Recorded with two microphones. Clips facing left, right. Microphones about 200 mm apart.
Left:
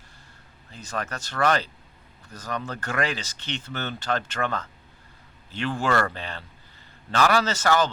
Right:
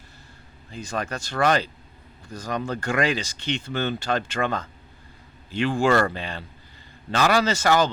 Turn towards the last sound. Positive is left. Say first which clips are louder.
# right 2 dB
turn(degrees=-15)  # may be behind; listen again after turning